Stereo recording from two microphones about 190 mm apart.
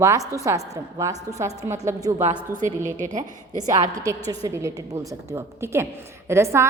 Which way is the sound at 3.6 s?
20° right (ahead or behind).